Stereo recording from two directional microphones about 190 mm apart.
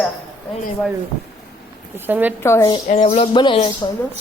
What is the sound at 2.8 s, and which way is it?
Speech, 35° left (ahead or behind).